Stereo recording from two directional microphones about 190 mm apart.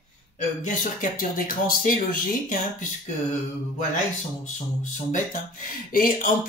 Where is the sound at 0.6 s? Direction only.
45° left (ahead or behind).